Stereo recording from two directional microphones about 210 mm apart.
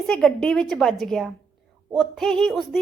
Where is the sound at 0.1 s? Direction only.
Centre (ahead or behind).